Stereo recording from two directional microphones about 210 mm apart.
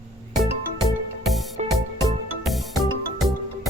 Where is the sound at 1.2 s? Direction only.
Centre (ahead or behind).